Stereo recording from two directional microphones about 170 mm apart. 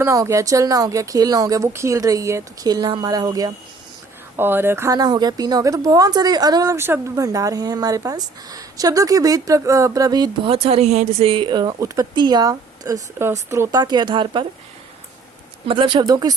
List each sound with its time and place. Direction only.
0.0 s speech: 15° right (ahead or behind)
15.6 s speech: 30° right (ahead or behind)